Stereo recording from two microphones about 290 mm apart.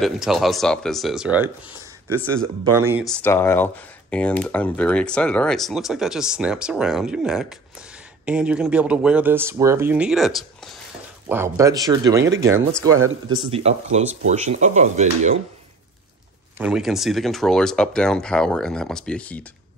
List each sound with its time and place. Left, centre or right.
0.0 s speech: centre
2.6 s speech: centre
12.9 s speech: right
13.4 s speech: centre
16.5 s speech: centre